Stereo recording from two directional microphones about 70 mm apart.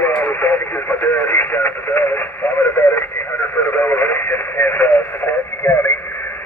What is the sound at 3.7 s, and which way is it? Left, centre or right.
Radio, left.